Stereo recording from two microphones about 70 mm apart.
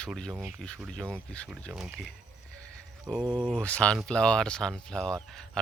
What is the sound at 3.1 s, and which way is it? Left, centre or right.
Speech, centre.